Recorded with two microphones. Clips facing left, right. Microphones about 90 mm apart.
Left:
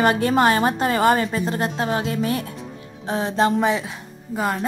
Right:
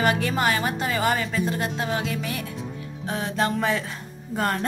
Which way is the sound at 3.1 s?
25° left (ahead or behind).